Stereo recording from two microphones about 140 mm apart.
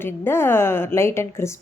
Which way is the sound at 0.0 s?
15° left (ahead or behind).